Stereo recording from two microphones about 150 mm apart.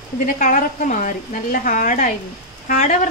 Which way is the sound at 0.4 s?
65° left (ahead or behind).